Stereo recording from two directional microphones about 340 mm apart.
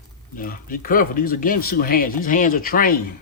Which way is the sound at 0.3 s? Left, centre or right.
Left.